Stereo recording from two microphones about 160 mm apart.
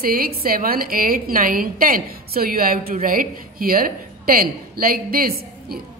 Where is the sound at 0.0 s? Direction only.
70° right (ahead or behind).